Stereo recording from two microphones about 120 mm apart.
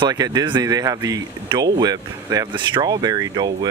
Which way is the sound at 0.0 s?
35° right (ahead or behind).